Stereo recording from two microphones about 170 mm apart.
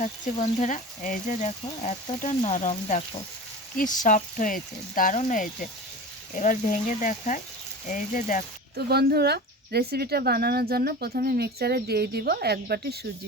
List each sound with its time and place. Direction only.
0.0 s speech: 40° left (ahead or behind)
3.8 s speech: 50° left (ahead or behind)
8.7 s a woman's voice: 70° right (ahead or behind)